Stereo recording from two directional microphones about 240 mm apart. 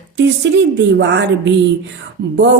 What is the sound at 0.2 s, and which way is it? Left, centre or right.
A woman's voice, right.